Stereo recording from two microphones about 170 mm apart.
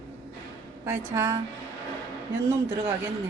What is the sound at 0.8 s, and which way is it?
Speech, 15° right (ahead or behind).